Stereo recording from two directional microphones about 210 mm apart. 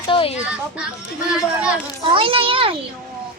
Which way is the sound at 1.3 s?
5° right (ahead or behind).